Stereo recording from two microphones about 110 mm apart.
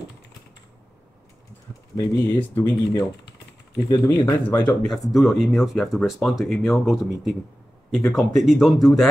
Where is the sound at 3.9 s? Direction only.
30° left (ahead or behind).